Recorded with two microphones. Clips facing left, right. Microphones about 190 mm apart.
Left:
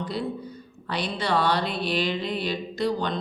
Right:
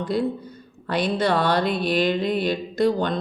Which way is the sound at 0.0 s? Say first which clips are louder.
Right 6 dB; 50° right (ahead or behind).